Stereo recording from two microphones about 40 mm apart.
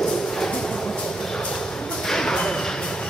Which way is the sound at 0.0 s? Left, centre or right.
Centre.